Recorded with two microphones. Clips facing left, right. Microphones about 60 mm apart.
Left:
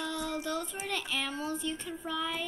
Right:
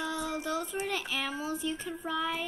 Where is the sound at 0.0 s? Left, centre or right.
Centre.